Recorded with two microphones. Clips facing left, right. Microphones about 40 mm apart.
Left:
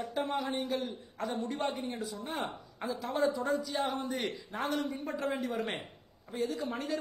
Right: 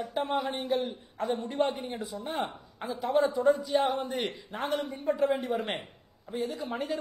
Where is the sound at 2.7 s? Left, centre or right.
Centre.